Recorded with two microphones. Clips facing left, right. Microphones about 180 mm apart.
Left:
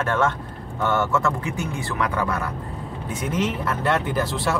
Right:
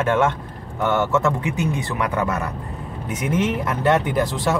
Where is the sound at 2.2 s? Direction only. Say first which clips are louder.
Right 2 dB; 20° right (ahead or behind).